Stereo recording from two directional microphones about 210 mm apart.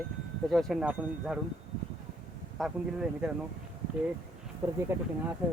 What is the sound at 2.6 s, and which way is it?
Speech, 5° right (ahead or behind).